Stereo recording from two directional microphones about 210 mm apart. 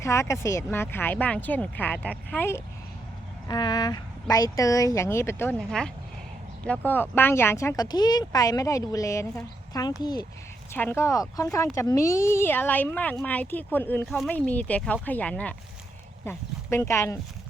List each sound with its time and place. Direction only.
0.0 s speech: 15° left (ahead or behind)
3.5 s speech: 20° left (ahead or behind)